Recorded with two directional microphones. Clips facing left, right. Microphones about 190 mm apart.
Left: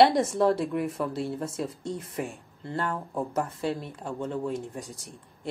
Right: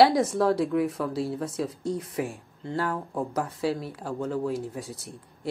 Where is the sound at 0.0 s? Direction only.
Centre (ahead or behind).